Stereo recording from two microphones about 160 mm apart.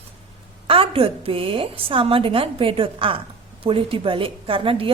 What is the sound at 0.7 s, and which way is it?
A woman's voice, 35° right (ahead or behind).